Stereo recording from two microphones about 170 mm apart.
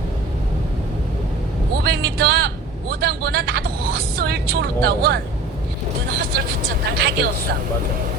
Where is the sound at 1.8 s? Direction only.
70° right (ahead or behind).